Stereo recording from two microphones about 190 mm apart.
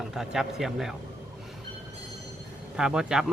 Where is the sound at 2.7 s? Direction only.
5° right (ahead or behind).